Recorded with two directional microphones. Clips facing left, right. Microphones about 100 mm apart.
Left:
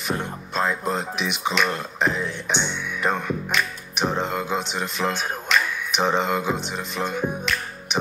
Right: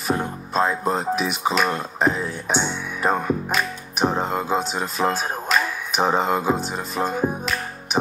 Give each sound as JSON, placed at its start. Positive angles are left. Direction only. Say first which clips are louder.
{"t": 0.2, "sound": "speech", "louder": "right 3 dB", "side_deg": -40}
{"t": 2.1, "sound": "music", "louder": "right 2 dB", "side_deg": -40}
{"t": 4.2, "sound": "speech", "louder": "right 3 dB", "side_deg": -35}
{"t": 7.9, "sound": "music", "louder": "right 3 dB", "side_deg": -40}